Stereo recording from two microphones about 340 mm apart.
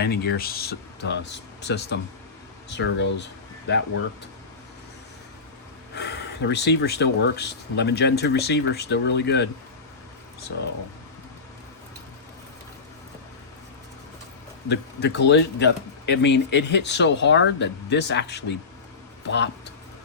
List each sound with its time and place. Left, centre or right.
0.0 s speech: left
5.9 s speech: left
14.7 s speech: left